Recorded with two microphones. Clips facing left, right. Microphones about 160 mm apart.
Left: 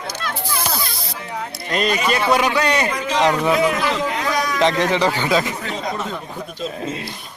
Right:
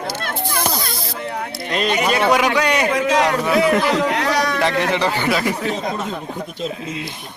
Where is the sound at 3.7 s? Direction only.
75° right (ahead or behind).